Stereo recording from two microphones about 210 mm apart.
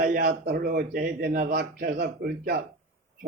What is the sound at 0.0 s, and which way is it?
A man's voice, 45° right (ahead or behind).